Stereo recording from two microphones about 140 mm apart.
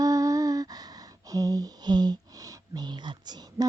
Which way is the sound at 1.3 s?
25° right (ahead or behind).